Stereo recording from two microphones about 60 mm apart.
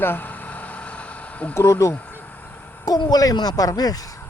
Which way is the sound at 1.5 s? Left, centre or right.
Left.